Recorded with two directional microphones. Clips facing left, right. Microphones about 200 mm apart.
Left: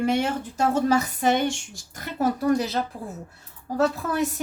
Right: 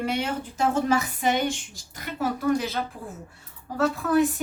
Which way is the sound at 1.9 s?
40° left (ahead or behind).